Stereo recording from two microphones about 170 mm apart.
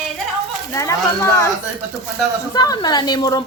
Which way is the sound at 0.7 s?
20° left (ahead or behind).